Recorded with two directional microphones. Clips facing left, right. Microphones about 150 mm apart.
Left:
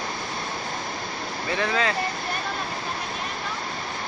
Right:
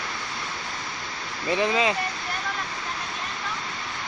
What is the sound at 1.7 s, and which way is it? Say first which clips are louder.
Speech: right 1 dB; 15° right (ahead or behind).